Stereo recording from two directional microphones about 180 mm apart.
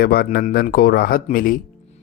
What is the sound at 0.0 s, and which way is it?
Speech, 55° left (ahead or behind).